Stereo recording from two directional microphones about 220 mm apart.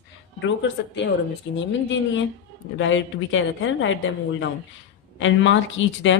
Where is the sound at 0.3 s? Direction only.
55° left (ahead or behind).